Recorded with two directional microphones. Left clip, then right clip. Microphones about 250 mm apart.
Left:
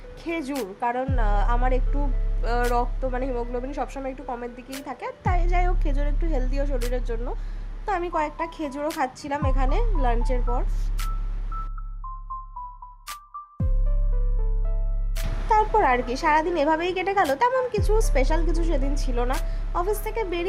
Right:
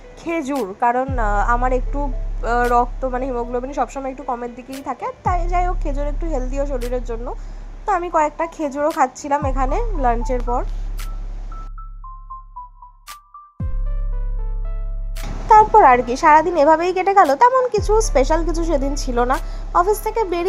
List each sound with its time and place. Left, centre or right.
0.3 s a woman's voice: centre
8.1 s a woman's voice: centre
8.9 s speech: centre
9.5 s a woman's voice: centre
15.4 s a woman's voice: centre